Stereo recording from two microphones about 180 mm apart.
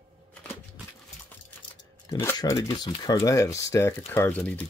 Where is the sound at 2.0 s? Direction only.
15° left (ahead or behind).